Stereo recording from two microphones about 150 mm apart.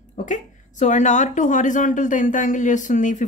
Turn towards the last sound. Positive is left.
turn(degrees=55)  # may be behind; listen again after turning